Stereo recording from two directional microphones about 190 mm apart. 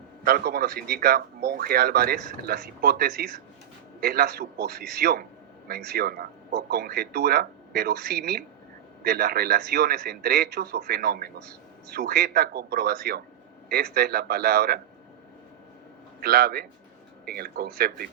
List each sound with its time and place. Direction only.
0.3 s a man's voice: 55° right (ahead or behind)
16.2 s a man's voice: 55° right (ahead or behind)